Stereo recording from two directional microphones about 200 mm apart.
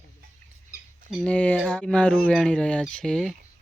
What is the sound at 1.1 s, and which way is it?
Speech, 5° left (ahead or behind).